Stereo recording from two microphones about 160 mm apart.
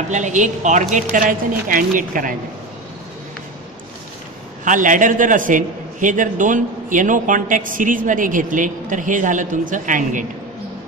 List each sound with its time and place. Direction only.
0.1 s a woman's voice: 50° right (ahead or behind)
4.6 s a man's voice: 55° right (ahead or behind)